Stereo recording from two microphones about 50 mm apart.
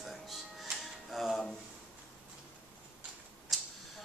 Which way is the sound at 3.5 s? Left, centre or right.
Centre.